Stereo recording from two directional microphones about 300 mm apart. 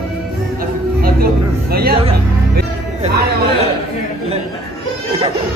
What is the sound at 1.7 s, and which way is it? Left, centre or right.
Music, right.